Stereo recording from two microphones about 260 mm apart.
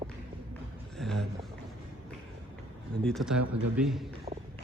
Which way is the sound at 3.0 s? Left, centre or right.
Centre.